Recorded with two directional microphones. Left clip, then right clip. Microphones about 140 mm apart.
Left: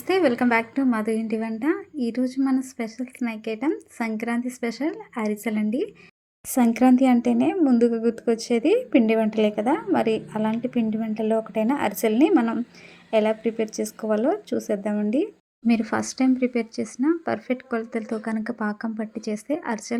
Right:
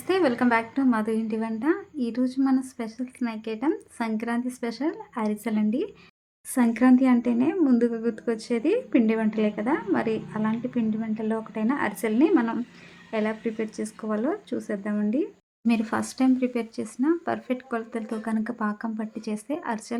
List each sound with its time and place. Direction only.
0.1 s speech: 15° left (ahead or behind)